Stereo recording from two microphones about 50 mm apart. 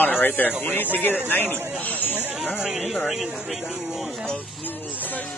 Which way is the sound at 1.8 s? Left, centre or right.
Left.